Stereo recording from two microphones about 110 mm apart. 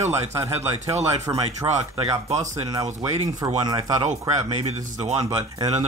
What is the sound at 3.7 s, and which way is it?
Speech, 40° right (ahead or behind).